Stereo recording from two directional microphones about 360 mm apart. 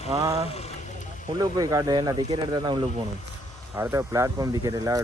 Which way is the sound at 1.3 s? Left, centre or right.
Centre.